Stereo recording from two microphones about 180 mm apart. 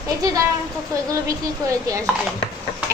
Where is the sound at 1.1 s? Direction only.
20° right (ahead or behind).